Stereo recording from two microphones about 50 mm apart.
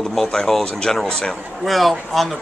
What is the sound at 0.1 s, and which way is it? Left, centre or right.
Speech, centre.